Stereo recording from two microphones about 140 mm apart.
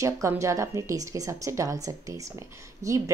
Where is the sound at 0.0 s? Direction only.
20° right (ahead or behind).